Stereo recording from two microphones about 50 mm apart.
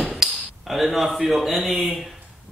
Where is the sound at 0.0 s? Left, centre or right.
Centre.